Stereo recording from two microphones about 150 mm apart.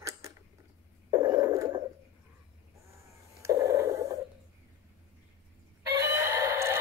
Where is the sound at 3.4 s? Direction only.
20° right (ahead or behind).